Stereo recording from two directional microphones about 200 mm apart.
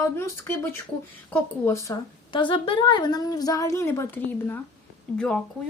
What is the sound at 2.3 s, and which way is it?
A woman's voice, 25° left (ahead or behind).